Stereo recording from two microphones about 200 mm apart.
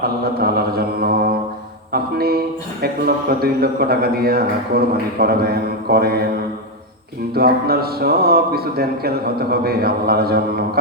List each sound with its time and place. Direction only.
0.0 s a man's voice: 50° right (ahead or behind)
7.3 s a man's voice: 50° right (ahead or behind)